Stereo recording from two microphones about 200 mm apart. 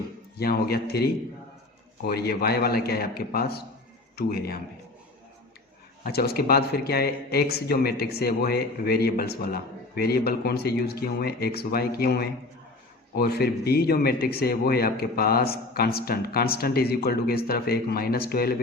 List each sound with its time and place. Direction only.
0.3 s a man's voice: 50° left (ahead or behind)
6.1 s a man's voice: 50° left (ahead or behind)